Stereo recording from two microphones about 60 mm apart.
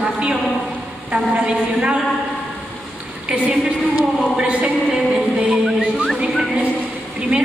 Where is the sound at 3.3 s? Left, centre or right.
Centre.